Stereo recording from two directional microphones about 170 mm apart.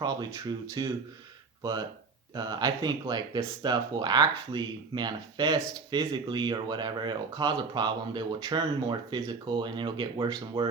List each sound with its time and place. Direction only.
0.4 s speech: 20° right (ahead or behind)
2.3 s speech: 25° right (ahead or behind)